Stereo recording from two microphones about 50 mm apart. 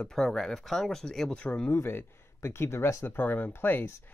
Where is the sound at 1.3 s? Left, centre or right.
Left.